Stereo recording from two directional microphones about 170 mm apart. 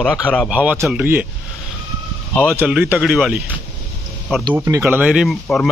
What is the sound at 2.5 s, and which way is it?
Speech, 10° right (ahead or behind).